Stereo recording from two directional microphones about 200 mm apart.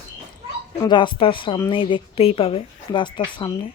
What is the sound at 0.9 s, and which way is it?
Speech, 25° left (ahead or behind).